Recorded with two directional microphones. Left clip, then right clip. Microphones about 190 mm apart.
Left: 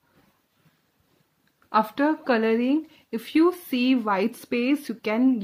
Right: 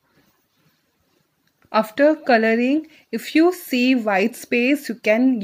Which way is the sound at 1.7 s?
15° right (ahead or behind).